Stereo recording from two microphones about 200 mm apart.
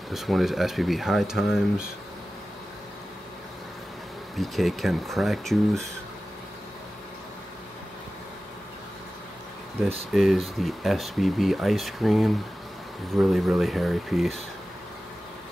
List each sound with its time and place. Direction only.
0.1 s speech: centre (ahead or behind)
4.4 s speech: centre (ahead or behind)
10.1 s speech: centre (ahead or behind)